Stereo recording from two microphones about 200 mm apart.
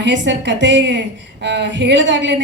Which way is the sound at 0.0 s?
65° right (ahead or behind).